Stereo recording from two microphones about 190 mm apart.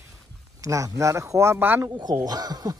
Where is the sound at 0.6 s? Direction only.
15° right (ahead or behind).